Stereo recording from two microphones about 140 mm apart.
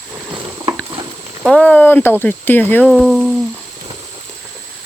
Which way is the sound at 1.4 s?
5° left (ahead or behind).